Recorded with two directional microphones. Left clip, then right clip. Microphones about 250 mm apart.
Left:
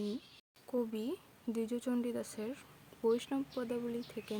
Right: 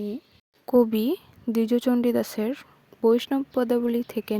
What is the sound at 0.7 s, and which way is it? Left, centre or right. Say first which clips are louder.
A woman's voice: right 17 dB; right.